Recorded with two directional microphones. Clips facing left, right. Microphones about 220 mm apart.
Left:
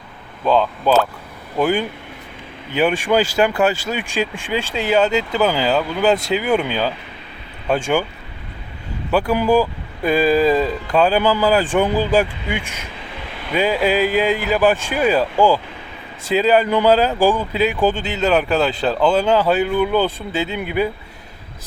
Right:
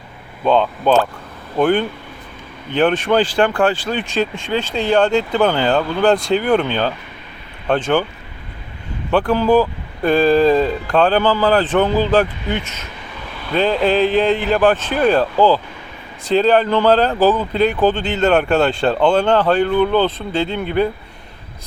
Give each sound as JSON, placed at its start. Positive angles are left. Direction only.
{"t": 0.4, "sound": "speech", "side_deg": 5}
{"t": 9.1, "sound": "speech", "side_deg": 10}